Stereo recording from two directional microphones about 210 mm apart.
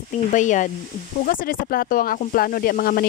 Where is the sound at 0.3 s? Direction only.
35° left (ahead or behind).